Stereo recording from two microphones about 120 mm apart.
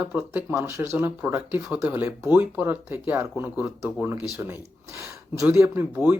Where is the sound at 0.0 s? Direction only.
10° right (ahead or behind).